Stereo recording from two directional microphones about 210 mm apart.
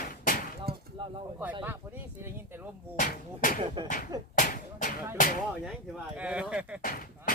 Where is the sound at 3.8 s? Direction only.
20° right (ahead or behind).